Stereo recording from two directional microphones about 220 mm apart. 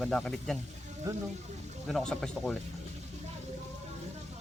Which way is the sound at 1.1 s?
15° right (ahead or behind).